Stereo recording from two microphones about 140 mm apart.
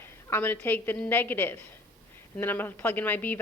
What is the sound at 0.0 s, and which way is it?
A woman's voice, 15° left (ahead or behind).